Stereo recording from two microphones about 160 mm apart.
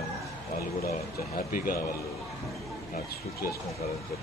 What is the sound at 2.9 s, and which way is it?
Speech, 70° left (ahead or behind).